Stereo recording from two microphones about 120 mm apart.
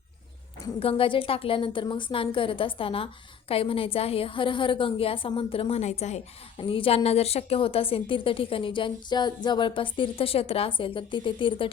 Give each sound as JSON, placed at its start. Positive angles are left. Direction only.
{"t": 0.8, "sound": "a woman's voice", "side_deg": 50}
{"t": 5.8, "sound": "a woman's voice", "side_deg": 70}
{"t": 6.6, "sound": "a woman's voice", "side_deg": 45}